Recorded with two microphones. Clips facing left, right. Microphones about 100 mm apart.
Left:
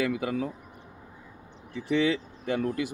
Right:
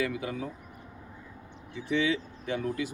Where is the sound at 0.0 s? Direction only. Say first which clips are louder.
Left 3 dB; 65° left (ahead or behind).